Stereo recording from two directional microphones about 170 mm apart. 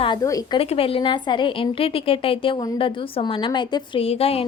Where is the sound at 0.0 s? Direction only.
25° left (ahead or behind).